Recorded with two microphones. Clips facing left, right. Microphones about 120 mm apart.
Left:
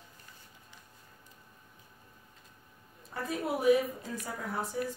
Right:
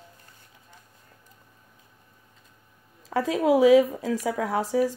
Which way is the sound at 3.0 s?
90° right.